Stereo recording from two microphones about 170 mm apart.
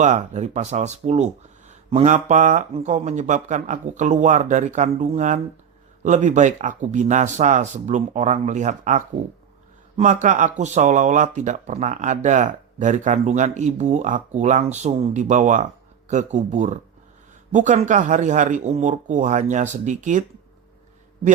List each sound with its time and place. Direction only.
0.0 s speech: 45° right (ahead or behind)